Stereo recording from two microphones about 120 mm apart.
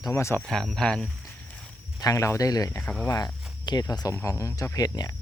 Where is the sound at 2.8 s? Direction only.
10° left (ahead or behind).